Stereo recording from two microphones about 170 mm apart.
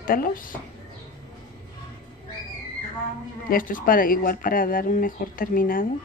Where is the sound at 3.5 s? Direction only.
55° left (ahead or behind).